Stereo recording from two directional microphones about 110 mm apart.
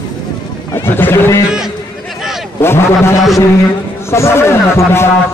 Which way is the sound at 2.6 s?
25° left (ahead or behind).